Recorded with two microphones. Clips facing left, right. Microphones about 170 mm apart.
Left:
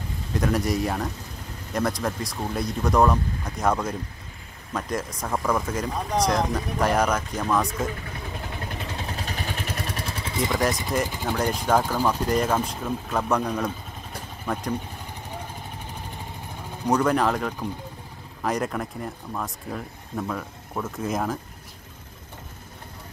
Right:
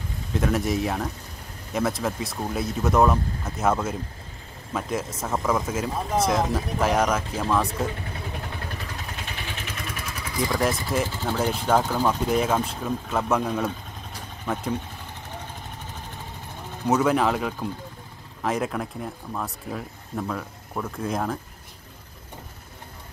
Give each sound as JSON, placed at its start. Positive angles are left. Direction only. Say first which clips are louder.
{"t": 0.3, "sound": "speech", "louder": "even", "side_deg": 0}
{"t": 9.0, "sound": "vehicle", "louder": "left 4 dB", "side_deg": 35}
{"t": 11.1, "sound": "speech", "louder": "even", "side_deg": 15}
{"t": 11.3, "sound": "speech", "louder": "even", "side_deg": -5}
{"t": 11.8, "sound": "speech", "louder": "even", "side_deg": 10}
{"t": 12.3, "sound": "speech", "louder": "even", "side_deg": -5}
{"t": 16.8, "sound": "speech", "louder": "even", "side_deg": -5}